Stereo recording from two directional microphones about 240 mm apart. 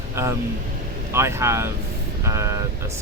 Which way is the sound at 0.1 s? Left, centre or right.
Centre.